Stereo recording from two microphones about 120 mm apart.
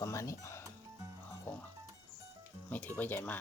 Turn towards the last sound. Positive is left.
turn(degrees=15)  # may be behind; listen again after turning